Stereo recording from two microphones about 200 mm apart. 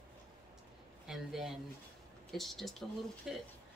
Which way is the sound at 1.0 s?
Centre (ahead or behind).